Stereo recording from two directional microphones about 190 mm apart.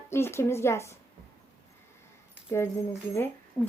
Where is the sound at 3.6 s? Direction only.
20° left (ahead or behind).